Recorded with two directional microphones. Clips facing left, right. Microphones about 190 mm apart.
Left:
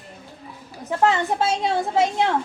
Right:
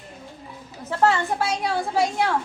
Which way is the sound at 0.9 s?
20° left (ahead or behind).